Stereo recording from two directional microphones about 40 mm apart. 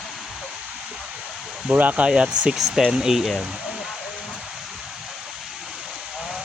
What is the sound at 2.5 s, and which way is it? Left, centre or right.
Speech, centre.